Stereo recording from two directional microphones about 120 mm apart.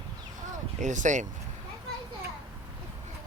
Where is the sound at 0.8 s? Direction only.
90° right.